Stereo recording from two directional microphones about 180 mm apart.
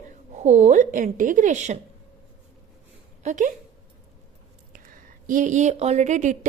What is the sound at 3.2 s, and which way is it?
Speech, 45° right (ahead or behind).